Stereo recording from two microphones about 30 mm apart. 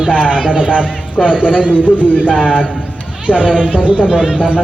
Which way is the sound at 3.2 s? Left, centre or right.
Right.